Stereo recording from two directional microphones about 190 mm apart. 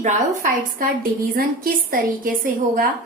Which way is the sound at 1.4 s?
50° right (ahead or behind).